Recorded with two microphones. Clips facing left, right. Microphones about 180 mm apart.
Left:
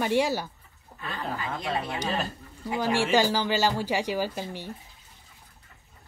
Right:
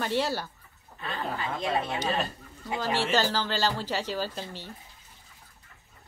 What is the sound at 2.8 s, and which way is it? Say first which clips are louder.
Speech: left 3 dB; 10° left (ahead or behind).